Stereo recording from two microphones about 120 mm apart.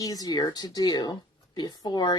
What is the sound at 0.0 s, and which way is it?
Speech, 30° left (ahead or behind).